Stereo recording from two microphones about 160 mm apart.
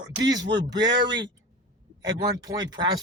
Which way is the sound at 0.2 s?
25° right (ahead or behind).